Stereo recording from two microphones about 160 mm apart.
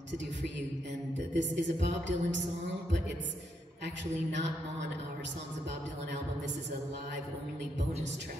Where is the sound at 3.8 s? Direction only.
90° right.